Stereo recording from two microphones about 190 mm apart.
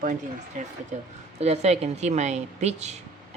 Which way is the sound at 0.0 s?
45° right (ahead or behind).